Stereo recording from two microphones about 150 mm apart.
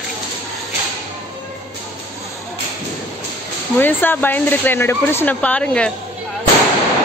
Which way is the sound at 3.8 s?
15° left (ahead or behind).